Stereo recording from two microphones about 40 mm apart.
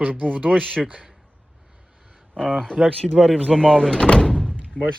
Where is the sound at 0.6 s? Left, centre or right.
Centre.